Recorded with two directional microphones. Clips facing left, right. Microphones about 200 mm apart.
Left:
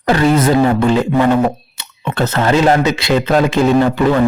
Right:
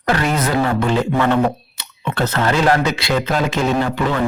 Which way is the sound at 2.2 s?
25° left (ahead or behind).